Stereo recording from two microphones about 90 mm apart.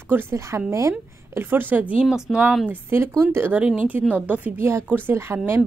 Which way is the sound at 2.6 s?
25° right (ahead or behind).